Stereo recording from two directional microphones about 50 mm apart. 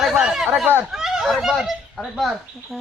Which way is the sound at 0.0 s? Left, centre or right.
Centre.